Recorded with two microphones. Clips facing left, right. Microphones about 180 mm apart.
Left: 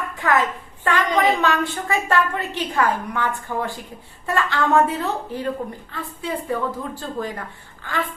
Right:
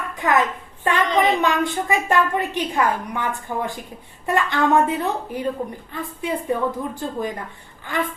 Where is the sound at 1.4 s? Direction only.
15° right (ahead or behind).